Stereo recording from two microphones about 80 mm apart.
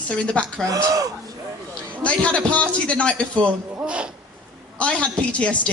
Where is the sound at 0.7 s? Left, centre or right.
Right.